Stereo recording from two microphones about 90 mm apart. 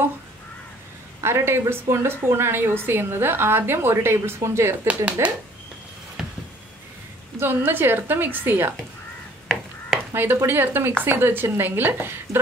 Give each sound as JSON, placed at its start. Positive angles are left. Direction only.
{"t": 1.2, "sound": "a woman's voice", "side_deg": -30}
{"t": 6.2, "sound": "a sound", "side_deg": -5}
{"t": 7.3, "sound": "a woman's voice", "side_deg": -25}
{"t": 10.1, "sound": "a woman's voice", "side_deg": -25}